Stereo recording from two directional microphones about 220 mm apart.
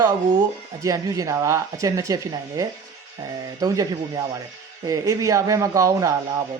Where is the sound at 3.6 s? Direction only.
15° right (ahead or behind).